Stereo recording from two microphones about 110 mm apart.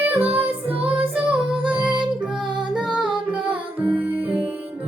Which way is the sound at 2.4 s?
45° right (ahead or behind).